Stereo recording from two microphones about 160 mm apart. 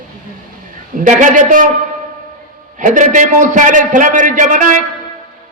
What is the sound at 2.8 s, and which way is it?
A man's voice, 55° right (ahead or behind).